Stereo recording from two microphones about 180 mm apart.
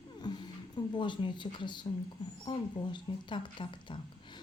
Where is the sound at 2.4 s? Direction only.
25° left (ahead or behind).